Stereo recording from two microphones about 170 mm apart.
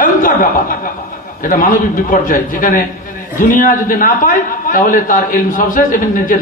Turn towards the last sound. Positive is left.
turn(degrees=55)  # may be behind; listen again after turning